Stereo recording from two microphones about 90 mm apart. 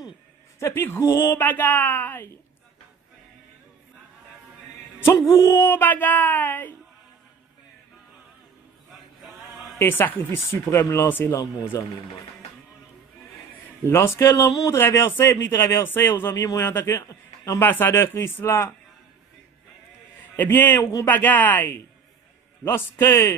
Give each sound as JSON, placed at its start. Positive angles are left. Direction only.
{"t": 0.6, "sound": "speech", "side_deg": 25}
{"t": 1.4, "sound": "speech", "side_deg": 20}
{"t": 5.0, "sound": "speech", "side_deg": 35}
{"t": 8.9, "sound": "male singing", "side_deg": 0}
{"t": 9.8, "sound": "speech", "side_deg": 25}
{"t": 13.8, "sound": "speech", "side_deg": 30}
{"t": 17.0, "sound": "a sound", "side_deg": 40}
{"t": 17.6, "sound": "speech", "side_deg": 25}
{"t": 20.3, "sound": "speech", "side_deg": 25}